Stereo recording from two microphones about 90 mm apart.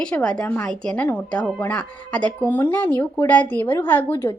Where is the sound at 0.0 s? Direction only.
10° left (ahead or behind).